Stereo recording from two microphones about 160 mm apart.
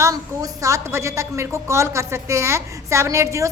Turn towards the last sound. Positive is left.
turn(degrees=-20)  # may be behind; listen again after turning